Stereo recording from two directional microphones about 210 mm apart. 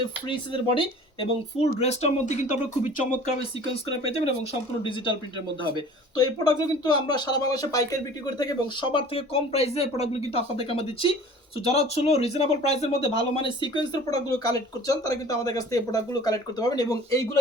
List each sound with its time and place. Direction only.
0.3 s speech: 25° left (ahead or behind)
4.8 s speech: 25° left (ahead or behind)
6.1 s speech: 20° left (ahead or behind)